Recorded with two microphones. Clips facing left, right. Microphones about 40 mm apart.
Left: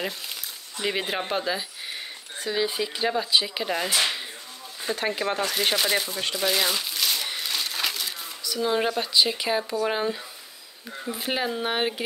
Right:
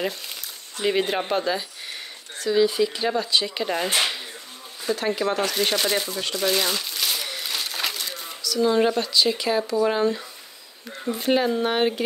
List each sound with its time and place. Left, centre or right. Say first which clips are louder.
0.7 s speech: right 5 dB; centre
2.3 s speech: right 6 dB; centre
4.8 s speech: right 3 dB; left
5.5 s speech: right 1 dB; centre
7.3 s a sound: even; centre
8.4 s speech: right 5 dB; centre